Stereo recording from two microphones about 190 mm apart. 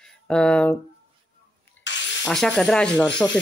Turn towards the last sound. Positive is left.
turn(degrees=5)  # may be behind; listen again after turning